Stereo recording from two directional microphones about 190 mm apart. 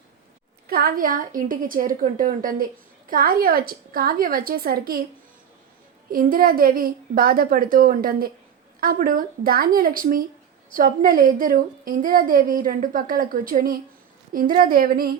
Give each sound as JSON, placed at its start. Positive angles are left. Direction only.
{"t": 0.7, "sound": "a woman's voice", "side_deg": -50}
{"t": 6.1, "sound": "a woman's voice", "side_deg": -50}